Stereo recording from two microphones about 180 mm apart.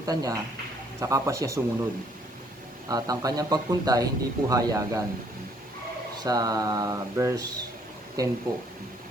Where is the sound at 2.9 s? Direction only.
20° right (ahead or behind).